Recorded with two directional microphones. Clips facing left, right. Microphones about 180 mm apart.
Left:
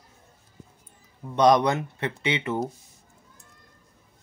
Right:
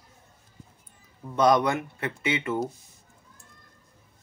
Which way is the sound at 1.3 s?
20° left (ahead or behind).